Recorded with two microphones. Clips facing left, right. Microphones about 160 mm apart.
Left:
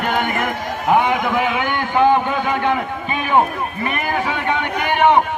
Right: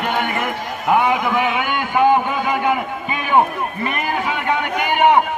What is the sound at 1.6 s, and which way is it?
Speech, 15° right (ahead or behind).